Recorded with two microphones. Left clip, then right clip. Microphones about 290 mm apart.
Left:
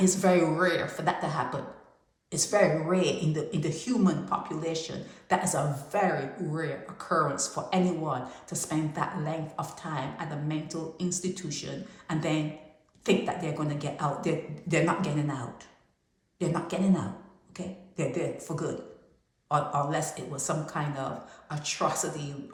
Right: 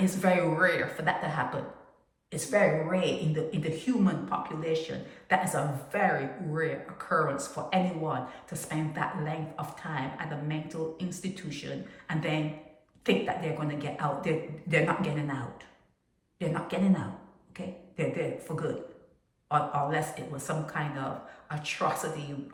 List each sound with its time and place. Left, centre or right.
0.0 s speech: centre
5.9 s speech: centre